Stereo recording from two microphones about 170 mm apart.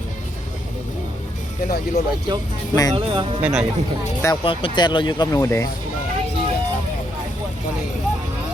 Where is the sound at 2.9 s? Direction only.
30° right (ahead or behind).